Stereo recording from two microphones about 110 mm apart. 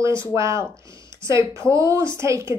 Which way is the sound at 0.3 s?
25° right (ahead or behind).